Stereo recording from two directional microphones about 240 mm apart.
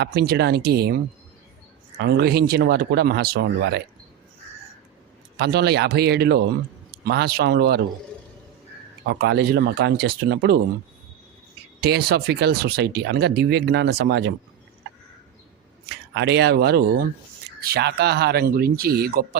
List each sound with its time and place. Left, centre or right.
0.0 s speech: right
2.0 s speech: right
5.4 s speech: right
9.0 s speech: right
11.8 s speech: right
15.9 s speech: right